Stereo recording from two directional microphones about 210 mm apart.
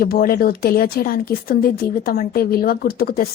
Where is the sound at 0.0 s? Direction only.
45° left (ahead or behind).